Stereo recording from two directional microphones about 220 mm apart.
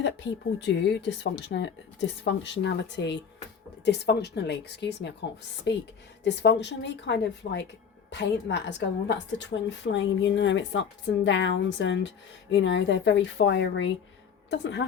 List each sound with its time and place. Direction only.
0.6 s a woman's voice: 55° left (ahead or behind)